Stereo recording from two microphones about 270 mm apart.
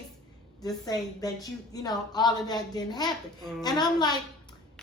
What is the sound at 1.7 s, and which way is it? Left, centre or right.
A woman's voice, centre.